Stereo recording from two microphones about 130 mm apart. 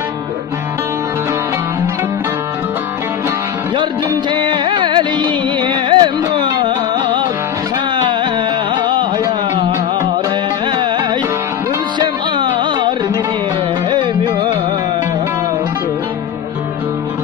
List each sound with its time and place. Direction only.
4.3 s music: 35° right (ahead or behind)
12.0 s music: 35° right (ahead or behind)